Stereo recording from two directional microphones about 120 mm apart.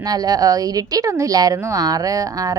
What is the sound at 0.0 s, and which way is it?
A woman's voice, 30° right (ahead or behind).